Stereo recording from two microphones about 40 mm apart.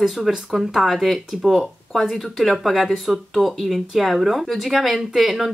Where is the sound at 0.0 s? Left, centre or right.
Centre.